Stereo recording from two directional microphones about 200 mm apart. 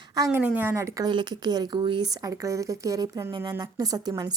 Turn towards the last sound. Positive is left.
turn(degrees=-20)  # may be behind; listen again after turning